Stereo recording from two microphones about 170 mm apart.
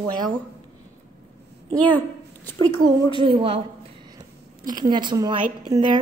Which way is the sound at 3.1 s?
30° right (ahead or behind).